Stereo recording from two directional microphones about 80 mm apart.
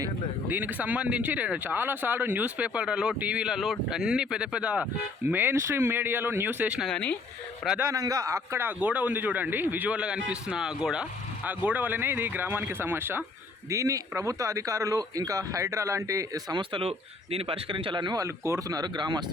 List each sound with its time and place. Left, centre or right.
0.4 s speech: right
5.3 s a man's voice: right
6.8 s speech: centre
7.8 s speech: right
8.5 s a man's voice: right
11.4 s a man's voice: right
13.7 s speech: right
16.5 s speech: right
17.7 s speech: right
18.2 s speech: right
18.7 s speech: right